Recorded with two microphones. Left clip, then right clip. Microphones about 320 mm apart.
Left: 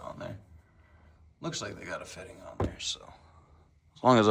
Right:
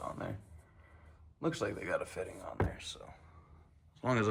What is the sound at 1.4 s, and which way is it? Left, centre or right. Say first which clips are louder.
A man's voice: right 2 dB; centre.